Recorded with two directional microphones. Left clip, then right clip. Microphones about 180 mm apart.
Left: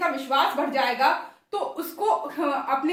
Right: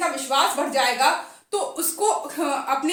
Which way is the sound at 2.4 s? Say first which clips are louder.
Right 1 dB; 30° right (ahead or behind).